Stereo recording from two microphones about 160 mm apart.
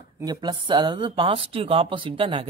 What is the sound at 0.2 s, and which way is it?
Speech, 25° right (ahead or behind).